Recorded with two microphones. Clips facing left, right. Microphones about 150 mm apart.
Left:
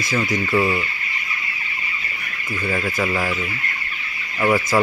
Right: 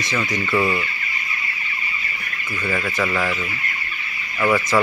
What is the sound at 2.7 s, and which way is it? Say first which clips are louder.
Speech: even; 20° left (ahead or behind).